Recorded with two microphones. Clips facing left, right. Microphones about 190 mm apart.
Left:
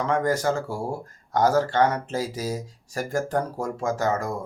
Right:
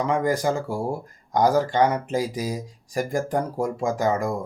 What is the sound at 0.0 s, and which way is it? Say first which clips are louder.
Speech: right 1 dB; 15° right (ahead or behind).